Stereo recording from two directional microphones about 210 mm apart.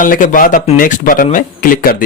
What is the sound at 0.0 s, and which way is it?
Speech, 40° left (ahead or behind).